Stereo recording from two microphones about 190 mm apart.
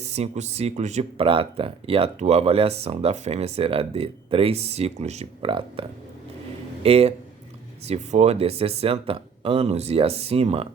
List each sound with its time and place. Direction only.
0.0 s speech: 35° right (ahead or behind)
6.8 s speech: 30° right (ahead or behind)